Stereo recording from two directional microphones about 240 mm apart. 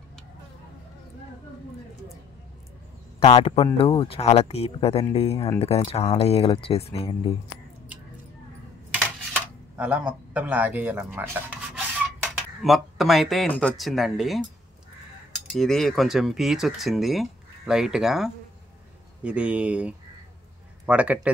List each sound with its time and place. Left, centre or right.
3.2 s speech: left
9.8 s speech: centre
15.5 s speech: centre